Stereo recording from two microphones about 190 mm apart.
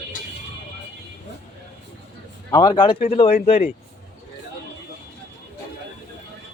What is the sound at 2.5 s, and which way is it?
Speech, 20° left (ahead or behind).